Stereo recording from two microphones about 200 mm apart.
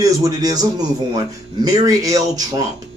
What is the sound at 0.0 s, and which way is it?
Speech, 15° right (ahead or behind).